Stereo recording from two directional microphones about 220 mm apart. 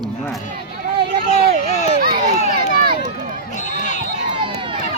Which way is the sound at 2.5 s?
40° right (ahead or behind).